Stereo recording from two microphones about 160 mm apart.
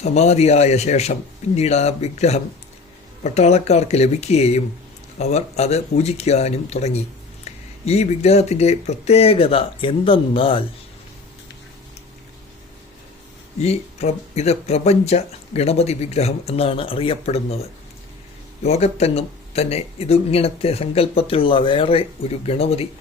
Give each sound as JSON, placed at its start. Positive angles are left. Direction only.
{"t": 0.0, "sound": "speech", "side_deg": 45}
{"t": 13.6, "sound": "speech", "side_deg": 40}
{"t": 18.6, "sound": "speech", "side_deg": 40}